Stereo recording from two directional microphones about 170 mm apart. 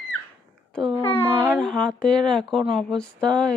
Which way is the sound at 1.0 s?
15° left (ahead or behind).